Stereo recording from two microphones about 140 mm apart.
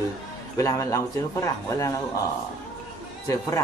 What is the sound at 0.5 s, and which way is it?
Speech, 20° left (ahead or behind).